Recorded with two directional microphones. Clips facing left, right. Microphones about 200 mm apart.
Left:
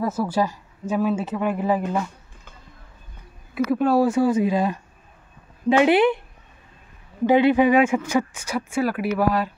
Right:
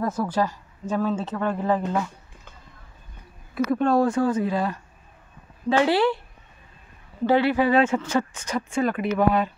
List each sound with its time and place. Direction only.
0.0 s speech: 5° left (ahead or behind)
3.5 s a woman's voice: 5° left (ahead or behind)
7.2 s speech: 20° left (ahead or behind)